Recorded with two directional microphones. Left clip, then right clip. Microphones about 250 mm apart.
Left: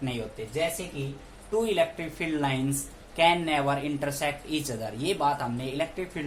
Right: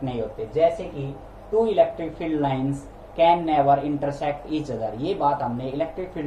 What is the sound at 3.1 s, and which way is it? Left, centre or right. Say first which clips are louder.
Speech: right 5 dB; left.